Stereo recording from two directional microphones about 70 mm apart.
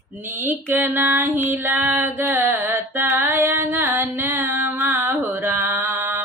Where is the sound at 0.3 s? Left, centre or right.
Right.